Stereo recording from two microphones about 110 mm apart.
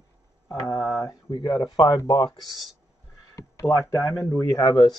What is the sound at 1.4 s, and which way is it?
Speech, 40° left (ahead or behind).